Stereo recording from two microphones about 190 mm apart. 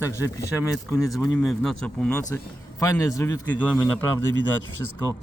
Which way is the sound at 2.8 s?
15° left (ahead or behind).